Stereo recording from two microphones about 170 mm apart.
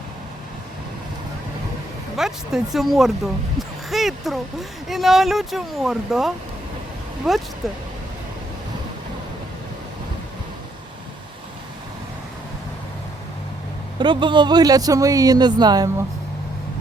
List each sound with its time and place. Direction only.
2.1 s speech: centre (ahead or behind)
14.0 s speech: 30° right (ahead or behind)